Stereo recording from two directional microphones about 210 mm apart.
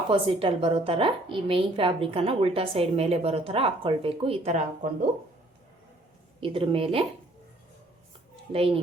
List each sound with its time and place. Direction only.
0.1 s a woman's voice: 25° right (ahead or behind)
6.4 s a woman's voice: 25° right (ahead or behind)
8.5 s a woman's voice: 25° right (ahead or behind)